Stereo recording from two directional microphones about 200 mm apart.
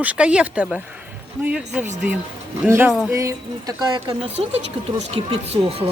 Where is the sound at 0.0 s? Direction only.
5° right (ahead or behind).